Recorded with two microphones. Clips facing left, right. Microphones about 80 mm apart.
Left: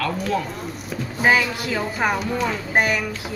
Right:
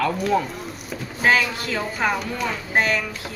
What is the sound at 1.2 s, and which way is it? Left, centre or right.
A woman's voice, centre.